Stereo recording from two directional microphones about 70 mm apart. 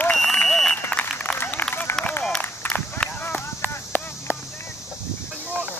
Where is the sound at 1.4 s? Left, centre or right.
Left.